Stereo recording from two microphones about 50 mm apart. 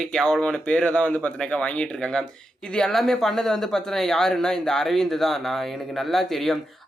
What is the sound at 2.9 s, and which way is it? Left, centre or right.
Speech, centre.